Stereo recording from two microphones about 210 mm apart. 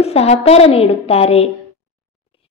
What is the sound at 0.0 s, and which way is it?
A child's voice, 30° left (ahead or behind).